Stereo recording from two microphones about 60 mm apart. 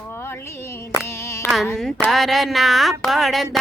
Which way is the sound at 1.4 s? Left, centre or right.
Left.